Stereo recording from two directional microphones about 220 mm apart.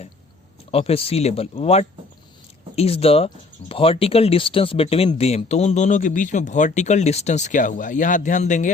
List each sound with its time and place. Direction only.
0.7 s speech: 25° left (ahead or behind)